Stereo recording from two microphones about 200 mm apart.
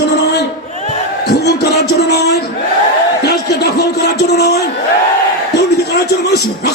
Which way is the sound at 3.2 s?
55° left (ahead or behind).